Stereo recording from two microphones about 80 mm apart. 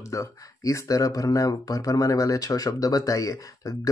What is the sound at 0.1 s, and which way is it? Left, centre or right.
Speech, left.